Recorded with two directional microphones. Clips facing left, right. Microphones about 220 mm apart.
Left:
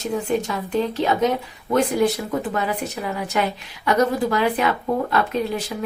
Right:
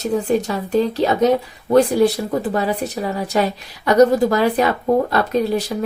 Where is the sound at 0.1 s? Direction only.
40° right (ahead or behind).